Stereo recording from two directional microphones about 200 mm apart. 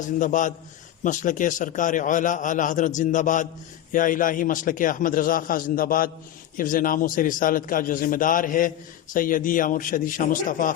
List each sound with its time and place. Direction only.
0.0 s a man's voice: 40° left (ahead or behind)